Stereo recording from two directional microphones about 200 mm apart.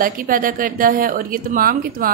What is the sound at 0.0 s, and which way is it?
A woman's voice, 45° right (ahead or behind).